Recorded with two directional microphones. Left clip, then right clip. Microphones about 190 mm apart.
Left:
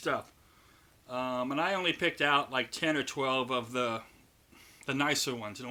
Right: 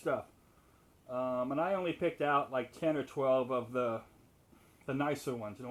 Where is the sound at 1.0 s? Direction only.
20° left (ahead or behind).